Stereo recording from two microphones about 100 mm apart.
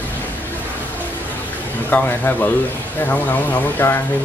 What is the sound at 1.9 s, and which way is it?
Speech, 20° left (ahead or behind).